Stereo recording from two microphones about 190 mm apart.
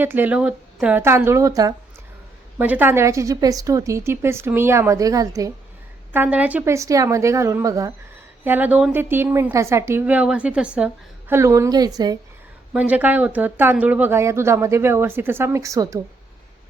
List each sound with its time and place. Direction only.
0.0 s a woman's voice: 10° right (ahead or behind)
12.7 s a woman's voice: 10° right (ahead or behind)